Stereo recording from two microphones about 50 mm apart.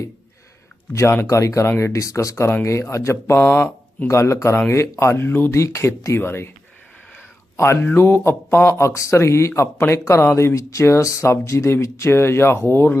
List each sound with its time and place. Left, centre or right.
1.3 s speech: left
4.1 s speech: left
5.1 s speech: left
5.5 s speech: left
6.1 s speech: left
7.5 s speech: left
7.9 s speech: left
9.9 s speech: left